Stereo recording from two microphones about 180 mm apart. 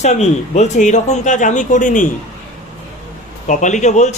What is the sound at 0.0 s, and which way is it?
Speech, 40° left (ahead or behind).